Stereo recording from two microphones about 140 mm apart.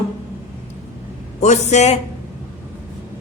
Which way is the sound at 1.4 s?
55° left (ahead or behind).